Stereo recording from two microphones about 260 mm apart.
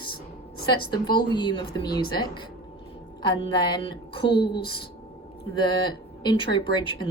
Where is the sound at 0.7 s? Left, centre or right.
Centre.